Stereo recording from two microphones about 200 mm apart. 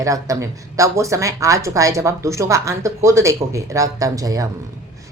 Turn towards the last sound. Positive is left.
turn(degrees=-15)  # may be behind; listen again after turning